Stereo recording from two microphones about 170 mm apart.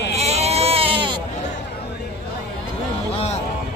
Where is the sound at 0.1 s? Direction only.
40° right (ahead or behind).